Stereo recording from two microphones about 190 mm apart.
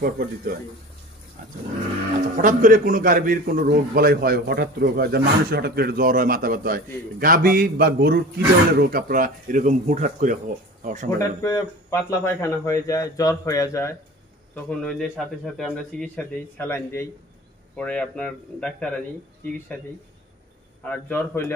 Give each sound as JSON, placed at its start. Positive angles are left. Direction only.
{"t": 0.0, "sound": "a man's voice", "side_deg": -50}
{"t": 2.3, "sound": "a man's voice", "side_deg": -45}
{"t": 11.1, "sound": "speech", "side_deg": 15}
{"t": 14.5, "sound": "a man's voice", "side_deg": 5}
{"t": 20.8, "sound": "speech", "side_deg": 10}